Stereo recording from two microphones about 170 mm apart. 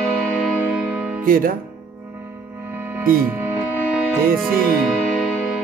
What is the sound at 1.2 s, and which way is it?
Music, 55° right (ahead or behind).